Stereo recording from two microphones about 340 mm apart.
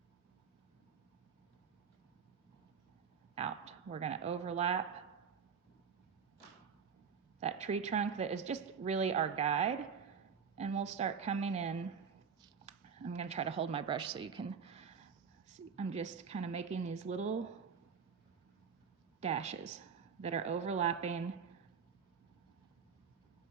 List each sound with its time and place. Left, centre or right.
3.3 s speech: centre
7.3 s a woman's voice: centre
19.2 s a woman's voice: centre